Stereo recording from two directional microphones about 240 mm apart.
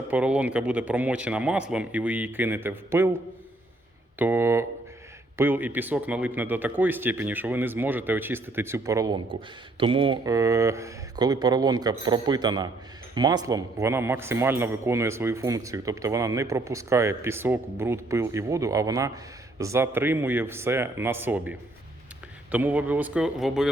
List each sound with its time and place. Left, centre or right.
0.1 s a man's voice: centre
4.2 s a man's voice: centre
22.5 s a man's voice: centre